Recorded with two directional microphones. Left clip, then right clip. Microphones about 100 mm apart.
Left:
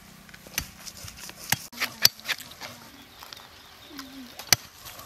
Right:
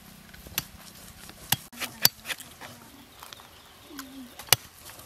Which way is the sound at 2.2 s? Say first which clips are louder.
Left 4 dB; 15° left (ahead or behind).